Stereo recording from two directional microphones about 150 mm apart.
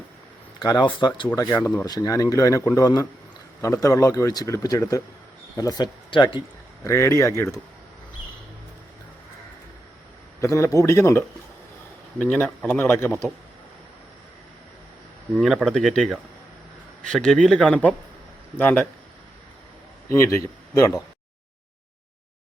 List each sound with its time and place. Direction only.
0.6 s speech: 30° left (ahead or behind)
1.4 s speech: 25° left (ahead or behind)
6.8 s speech: 20° left (ahead or behind)
10.4 s speech: 20° left (ahead or behind)
12.2 s speech: 10° left (ahead or behind)
15.4 s speech: centre (ahead or behind)
20.7 s speech: 20° left (ahead or behind)